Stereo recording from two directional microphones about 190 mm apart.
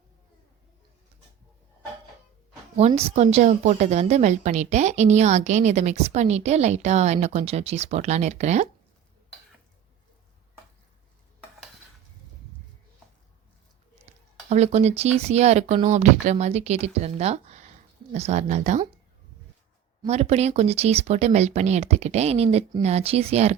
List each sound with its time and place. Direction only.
2.7 s a woman's voice: 30° right (ahead or behind)
14.5 s a woman's voice: 35° right (ahead or behind)
20.1 s a woman's voice: 35° right (ahead or behind)